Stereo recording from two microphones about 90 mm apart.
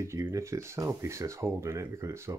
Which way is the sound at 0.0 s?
35° right (ahead or behind).